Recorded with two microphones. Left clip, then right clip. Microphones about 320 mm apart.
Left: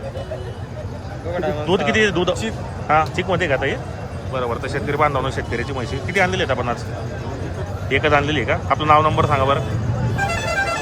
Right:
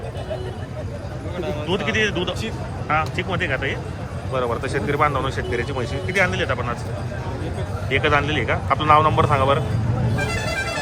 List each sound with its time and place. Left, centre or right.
1.6 s speech: centre
7.9 s speech: centre